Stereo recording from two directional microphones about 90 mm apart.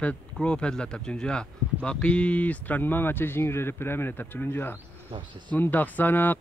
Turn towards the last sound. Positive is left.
turn(degrees=20)  # may be behind; listen again after turning